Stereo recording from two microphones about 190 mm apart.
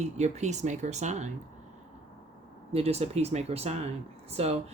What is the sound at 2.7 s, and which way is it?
Speech, 35° right (ahead or behind).